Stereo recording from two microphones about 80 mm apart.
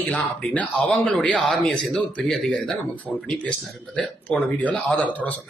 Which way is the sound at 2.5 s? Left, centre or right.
Centre.